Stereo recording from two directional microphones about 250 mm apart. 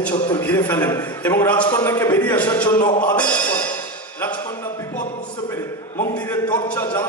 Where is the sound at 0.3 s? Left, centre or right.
Centre.